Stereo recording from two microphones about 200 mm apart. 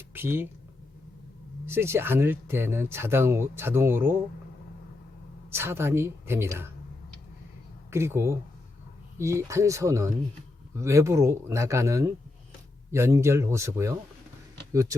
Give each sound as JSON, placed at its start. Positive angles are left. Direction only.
{"t": 0.1, "sound": "a sound", "side_deg": -10}
{"t": 1.6, "sound": "speech", "side_deg": -10}
{"t": 5.5, "sound": "speech", "side_deg": -10}
{"t": 7.9, "sound": "speech", "side_deg": -15}